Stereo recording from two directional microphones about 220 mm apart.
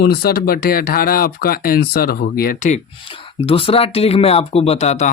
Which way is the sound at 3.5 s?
25° left (ahead or behind).